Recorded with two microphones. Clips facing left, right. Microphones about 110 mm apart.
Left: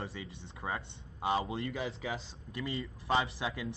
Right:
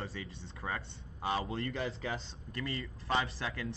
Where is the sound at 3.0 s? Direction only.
15° left (ahead or behind).